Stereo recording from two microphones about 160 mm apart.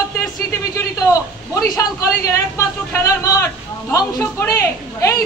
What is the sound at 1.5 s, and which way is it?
A man's voice, 20° left (ahead or behind).